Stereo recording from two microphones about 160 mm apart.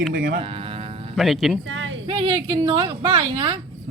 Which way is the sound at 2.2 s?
30° right (ahead or behind).